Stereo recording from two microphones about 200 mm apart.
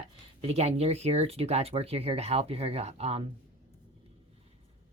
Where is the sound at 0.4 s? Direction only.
30° right (ahead or behind).